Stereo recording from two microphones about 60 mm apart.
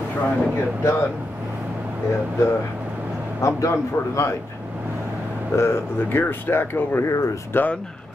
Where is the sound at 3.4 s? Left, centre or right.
Left.